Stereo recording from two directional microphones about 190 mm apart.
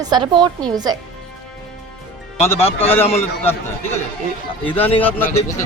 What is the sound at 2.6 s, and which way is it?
Speech, 30° left (ahead or behind).